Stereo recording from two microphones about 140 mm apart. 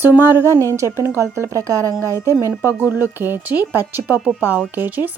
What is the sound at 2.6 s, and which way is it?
Speech, 15° right (ahead or behind).